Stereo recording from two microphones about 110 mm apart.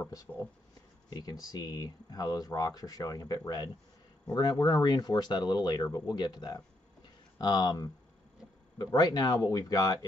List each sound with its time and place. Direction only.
0.3 s speech: 20° left (ahead or behind)
1.1 s speech: 35° left (ahead or behind)